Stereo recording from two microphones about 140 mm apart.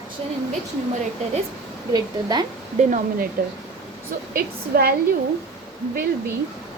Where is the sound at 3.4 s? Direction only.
90° right.